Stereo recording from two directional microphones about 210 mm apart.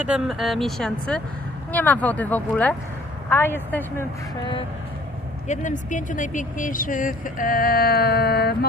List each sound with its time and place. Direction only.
0.0 s speech: 5° right (ahead or behind)
5.5 s speech: 35° left (ahead or behind)